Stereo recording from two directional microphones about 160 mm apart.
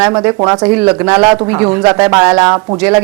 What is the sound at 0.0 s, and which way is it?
Speech, 10° right (ahead or behind).